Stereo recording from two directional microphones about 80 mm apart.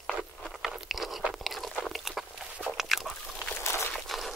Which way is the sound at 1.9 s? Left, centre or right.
Centre.